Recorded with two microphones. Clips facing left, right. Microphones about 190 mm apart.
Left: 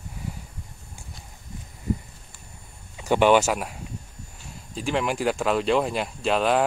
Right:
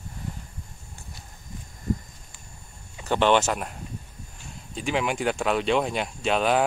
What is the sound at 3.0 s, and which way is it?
Speech, 10° left (ahead or behind).